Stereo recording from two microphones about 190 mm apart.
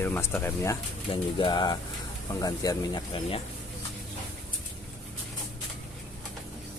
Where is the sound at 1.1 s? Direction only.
25° left (ahead or behind).